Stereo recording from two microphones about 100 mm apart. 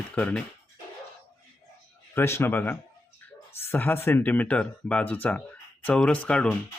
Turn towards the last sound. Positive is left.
turn(degrees=10)  # may be behind; listen again after turning